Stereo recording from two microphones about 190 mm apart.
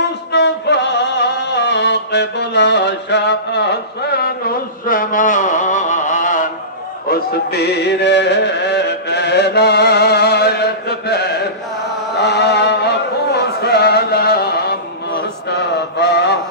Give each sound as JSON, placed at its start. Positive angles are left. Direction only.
{"t": 0.3, "sound": "music", "side_deg": 65}
{"t": 7.1, "sound": "music", "side_deg": 60}
{"t": 16.0, "sound": "mantra", "side_deg": 65}